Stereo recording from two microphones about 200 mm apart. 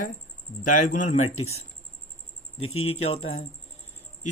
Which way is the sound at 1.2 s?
90° left.